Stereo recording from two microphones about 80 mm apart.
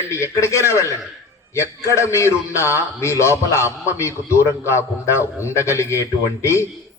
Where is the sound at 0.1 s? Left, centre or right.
Left.